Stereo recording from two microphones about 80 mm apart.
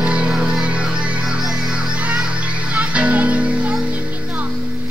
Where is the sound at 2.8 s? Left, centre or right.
Centre.